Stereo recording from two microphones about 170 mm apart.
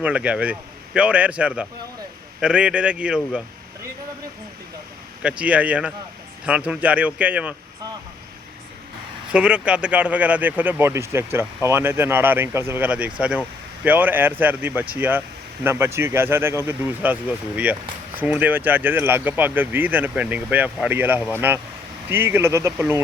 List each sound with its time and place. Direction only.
0.0 s speech: 5° right (ahead or behind)
5.2 s speech: 5° right (ahead or behind)
9.3 s speech: 5° right (ahead or behind)